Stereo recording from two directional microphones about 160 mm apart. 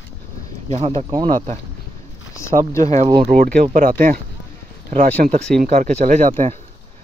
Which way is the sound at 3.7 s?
60° right (ahead or behind).